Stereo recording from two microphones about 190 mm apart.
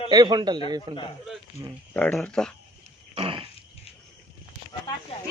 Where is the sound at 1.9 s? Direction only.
10° left (ahead or behind).